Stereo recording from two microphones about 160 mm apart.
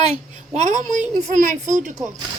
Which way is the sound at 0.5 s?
50° right (ahead or behind).